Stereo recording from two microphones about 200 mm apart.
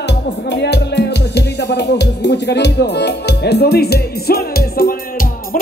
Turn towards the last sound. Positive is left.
turn(degrees=50)  # may be behind; listen again after turning